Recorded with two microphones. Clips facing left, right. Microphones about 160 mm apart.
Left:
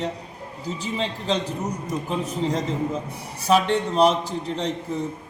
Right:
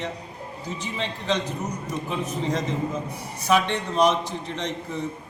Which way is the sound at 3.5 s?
35° left (ahead or behind).